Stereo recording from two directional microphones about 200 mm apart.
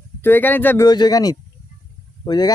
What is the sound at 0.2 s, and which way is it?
Speech, 10° left (ahead or behind).